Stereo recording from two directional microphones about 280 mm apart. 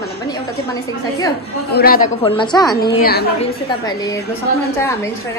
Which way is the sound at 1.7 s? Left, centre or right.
Left.